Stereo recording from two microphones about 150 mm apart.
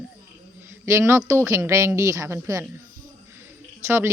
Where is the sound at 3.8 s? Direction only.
15° right (ahead or behind).